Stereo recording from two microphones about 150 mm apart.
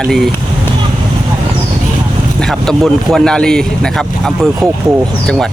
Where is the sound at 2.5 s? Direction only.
Centre (ahead or behind).